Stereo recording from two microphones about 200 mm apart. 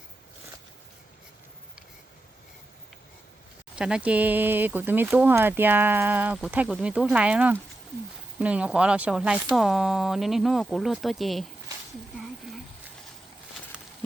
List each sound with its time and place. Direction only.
3.8 s speech: 5° right (ahead or behind)